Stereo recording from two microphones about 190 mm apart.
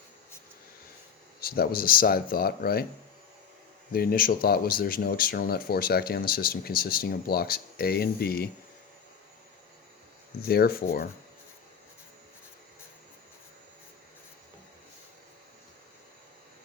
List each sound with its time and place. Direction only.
1.4 s speech: 50° left (ahead or behind)
3.9 s speech: 50° left (ahead or behind)
10.4 s speech: 55° left (ahead or behind)